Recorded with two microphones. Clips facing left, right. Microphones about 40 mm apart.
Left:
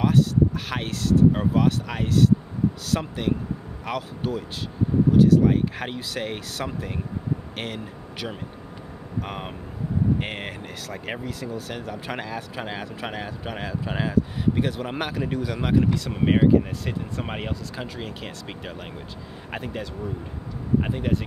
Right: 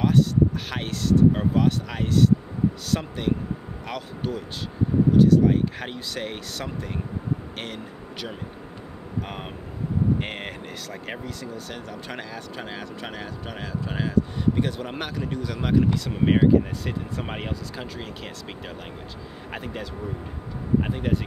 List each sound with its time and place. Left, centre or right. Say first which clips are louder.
0.0 s a man's voice: even; centre
19.5 s speech: left 2 dB; centre